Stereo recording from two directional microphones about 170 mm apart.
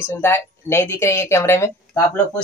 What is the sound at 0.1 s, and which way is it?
A woman's voice, 15° left (ahead or behind).